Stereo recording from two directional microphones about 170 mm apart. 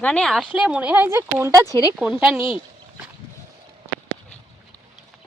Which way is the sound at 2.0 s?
5° right (ahead or behind).